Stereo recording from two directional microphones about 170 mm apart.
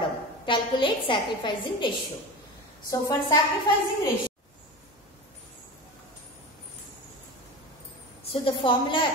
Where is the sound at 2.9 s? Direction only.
20° left (ahead or behind).